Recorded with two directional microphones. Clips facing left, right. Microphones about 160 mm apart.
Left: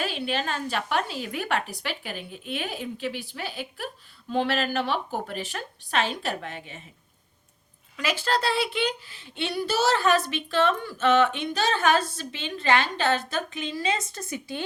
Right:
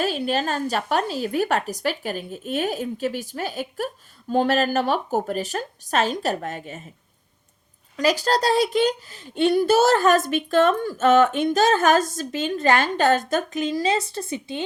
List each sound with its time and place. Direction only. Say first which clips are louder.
0.0 s speech: right 5 dB; 40° right (ahead or behind)
7.9 s speech: right 6 dB; 40° right (ahead or behind); by 14.6 s 25° right (ahead or behind)